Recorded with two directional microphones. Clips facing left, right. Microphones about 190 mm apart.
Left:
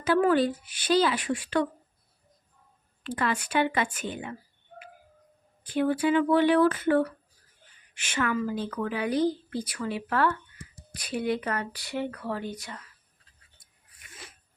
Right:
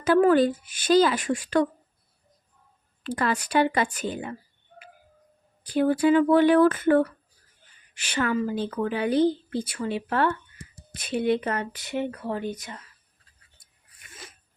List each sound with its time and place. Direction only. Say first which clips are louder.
0.0 s a woman's voice: right 4 dB; 45° right (ahead or behind)
3.0 s speech: right 3 dB; 40° right (ahead or behind)
5.6 s a woman's voice: right 4 dB; 35° right (ahead or behind)
7.9 s speech: right 3 dB; 35° right (ahead or behind)